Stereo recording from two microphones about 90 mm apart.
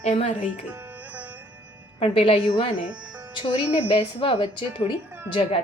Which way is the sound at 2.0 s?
90° left.